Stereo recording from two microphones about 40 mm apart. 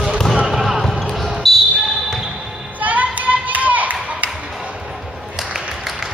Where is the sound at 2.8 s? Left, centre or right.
Right.